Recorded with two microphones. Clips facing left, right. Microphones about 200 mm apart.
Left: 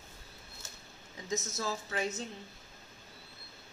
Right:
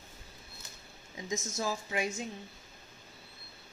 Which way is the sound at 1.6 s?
15° right (ahead or behind).